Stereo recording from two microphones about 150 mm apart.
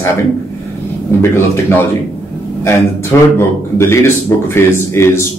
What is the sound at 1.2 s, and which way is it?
Speech, 15° left (ahead or behind).